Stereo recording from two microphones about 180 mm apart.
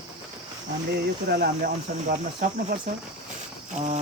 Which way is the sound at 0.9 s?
60° right (ahead or behind).